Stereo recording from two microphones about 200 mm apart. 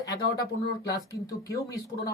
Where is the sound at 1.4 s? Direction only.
15° left (ahead or behind).